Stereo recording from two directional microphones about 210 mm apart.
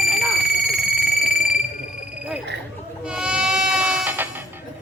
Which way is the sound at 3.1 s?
5° right (ahead or behind).